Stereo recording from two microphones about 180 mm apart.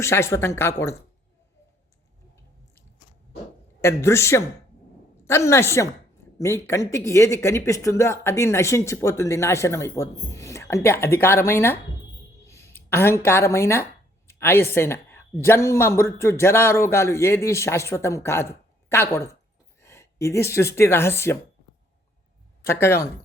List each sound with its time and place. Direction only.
0.0 s speech: 15° left (ahead or behind)
3.8 s speech: 15° left (ahead or behind)
22.6 s speech: 15° left (ahead or behind)